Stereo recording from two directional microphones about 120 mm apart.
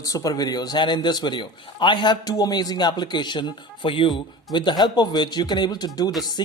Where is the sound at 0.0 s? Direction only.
30° left (ahead or behind).